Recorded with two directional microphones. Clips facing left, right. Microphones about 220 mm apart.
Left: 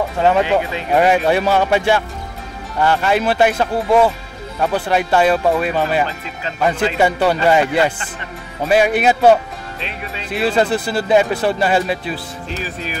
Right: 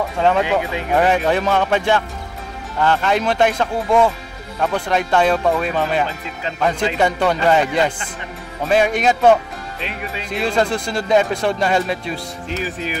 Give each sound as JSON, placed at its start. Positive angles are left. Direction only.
{"t": 0.9, "sound": "speech", "side_deg": 10}
{"t": 10.3, "sound": "speech", "side_deg": 5}